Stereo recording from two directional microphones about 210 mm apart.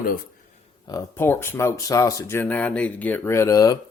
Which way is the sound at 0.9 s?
15° left (ahead or behind).